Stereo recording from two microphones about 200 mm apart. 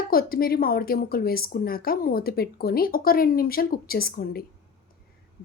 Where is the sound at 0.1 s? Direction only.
45° left (ahead or behind).